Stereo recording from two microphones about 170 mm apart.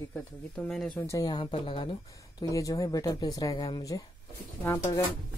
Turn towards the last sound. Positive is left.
turn(degrees=10)  # may be behind; listen again after turning